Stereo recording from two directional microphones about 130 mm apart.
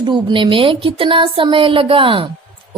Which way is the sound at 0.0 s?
35° right (ahead or behind).